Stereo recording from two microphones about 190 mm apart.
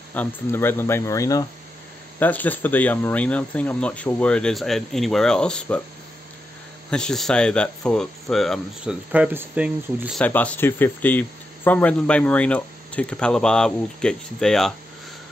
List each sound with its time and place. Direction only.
0.1 s speech: 10° left (ahead or behind)
6.9 s speech: 5° left (ahead or behind)
10.2 s speech: 10° left (ahead or behind)